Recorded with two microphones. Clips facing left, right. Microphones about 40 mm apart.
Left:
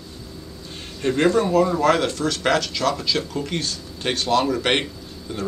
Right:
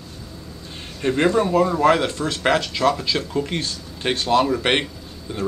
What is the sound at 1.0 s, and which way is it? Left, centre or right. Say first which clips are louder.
Speech: even; centre.